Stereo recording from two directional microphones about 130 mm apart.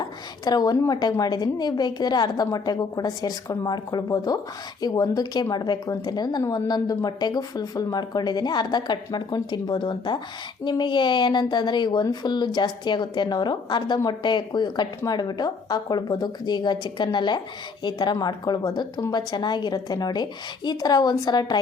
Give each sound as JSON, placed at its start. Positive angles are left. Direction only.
{"t": 0.0, "sound": "a child's voice", "side_deg": 30}